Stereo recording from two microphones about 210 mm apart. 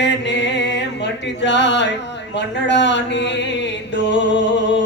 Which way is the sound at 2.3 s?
55° left (ahead or behind).